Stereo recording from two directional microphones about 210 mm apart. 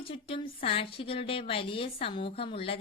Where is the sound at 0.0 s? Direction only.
25° left (ahead or behind).